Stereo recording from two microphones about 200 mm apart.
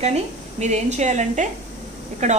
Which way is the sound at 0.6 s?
35° right (ahead or behind).